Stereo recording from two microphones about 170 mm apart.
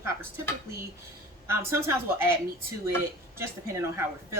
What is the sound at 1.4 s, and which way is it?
Speech, 15° right (ahead or behind).